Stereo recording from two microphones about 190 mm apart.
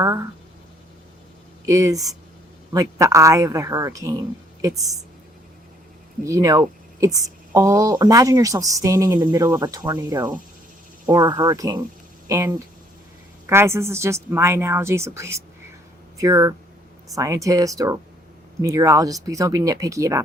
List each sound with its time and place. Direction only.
0.0 s speech: 15° right (ahead or behind)
1.6 s speech: 15° right (ahead or behind)
6.2 s speech: 15° right (ahead or behind)